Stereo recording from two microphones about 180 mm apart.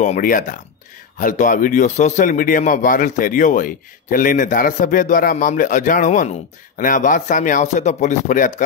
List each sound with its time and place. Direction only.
0.0 s a man's voice: 45° left (ahead or behind)